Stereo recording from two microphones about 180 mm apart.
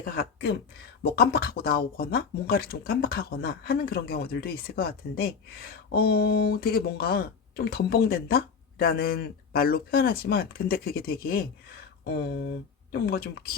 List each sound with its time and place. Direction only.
0.0 s speech: 60° left (ahead or behind)
12.9 s speech: 60° left (ahead or behind)